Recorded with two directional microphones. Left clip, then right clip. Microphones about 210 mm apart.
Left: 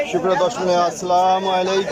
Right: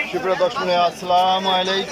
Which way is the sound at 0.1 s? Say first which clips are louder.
Left 1 dB; 10° left (ahead or behind).